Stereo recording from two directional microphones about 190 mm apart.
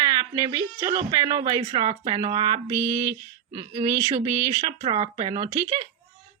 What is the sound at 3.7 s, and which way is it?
Speech, 35° right (ahead or behind).